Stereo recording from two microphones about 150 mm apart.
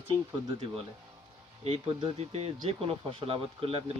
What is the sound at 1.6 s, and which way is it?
Speech, 40° right (ahead or behind).